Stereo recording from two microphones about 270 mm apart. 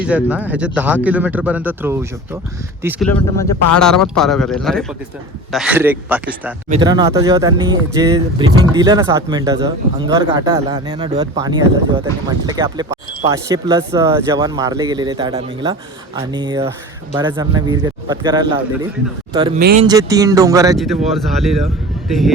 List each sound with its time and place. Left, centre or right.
0.0 s speech: centre
2.8 s speech: centre
6.7 s speech: centre
19.5 s speech: right
19.8 s speech: centre
20.7 s speech: centre